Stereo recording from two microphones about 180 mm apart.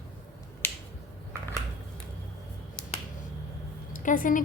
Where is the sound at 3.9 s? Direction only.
45° left (ahead or behind).